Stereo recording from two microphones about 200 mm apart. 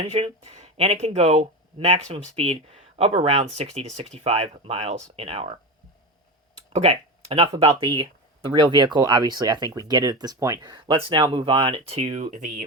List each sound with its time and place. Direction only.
0.1 s speech: 30° right (ahead or behind)
6.7 s speech: 30° right (ahead or behind)